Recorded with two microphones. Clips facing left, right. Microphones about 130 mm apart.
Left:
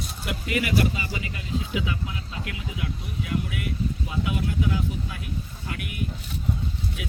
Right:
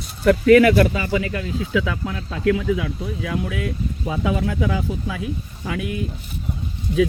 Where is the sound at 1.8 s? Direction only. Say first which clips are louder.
Right 5 dB; 90° right.